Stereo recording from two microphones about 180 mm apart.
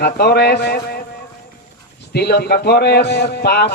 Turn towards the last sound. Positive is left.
turn(degrees=65)  # may be behind; listen again after turning